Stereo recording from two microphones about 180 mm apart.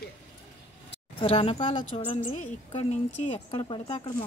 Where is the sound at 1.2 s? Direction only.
30° left (ahead or behind).